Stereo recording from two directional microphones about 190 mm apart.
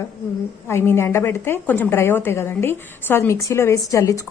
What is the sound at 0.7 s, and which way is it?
A woman's voice, 15° left (ahead or behind).